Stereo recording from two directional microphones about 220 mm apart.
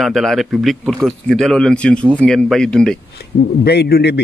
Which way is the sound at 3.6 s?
45° left (ahead or behind).